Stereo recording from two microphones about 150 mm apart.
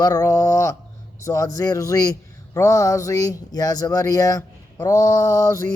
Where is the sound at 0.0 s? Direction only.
25° left (ahead or behind).